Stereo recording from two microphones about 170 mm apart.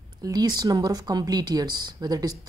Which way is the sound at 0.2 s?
25° right (ahead or behind).